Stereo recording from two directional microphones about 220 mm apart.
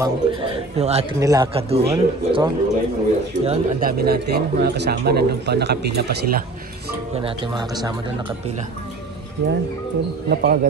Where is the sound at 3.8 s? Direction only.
45° right (ahead or behind).